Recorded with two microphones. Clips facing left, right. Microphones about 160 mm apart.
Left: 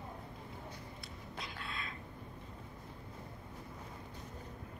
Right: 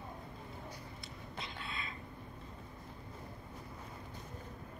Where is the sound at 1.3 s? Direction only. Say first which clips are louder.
Even; centre (ahead or behind).